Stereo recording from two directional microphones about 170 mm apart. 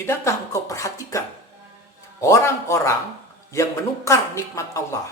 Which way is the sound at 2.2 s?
15° left (ahead or behind).